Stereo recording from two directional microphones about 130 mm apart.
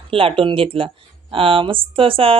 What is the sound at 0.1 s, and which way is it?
Speech, 45° right (ahead or behind).